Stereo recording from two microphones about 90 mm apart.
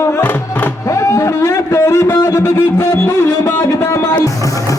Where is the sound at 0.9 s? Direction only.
35° left (ahead or behind).